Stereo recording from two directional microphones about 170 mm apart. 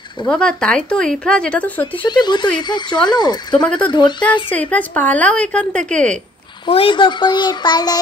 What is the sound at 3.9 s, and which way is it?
Speech, 25° left (ahead or behind).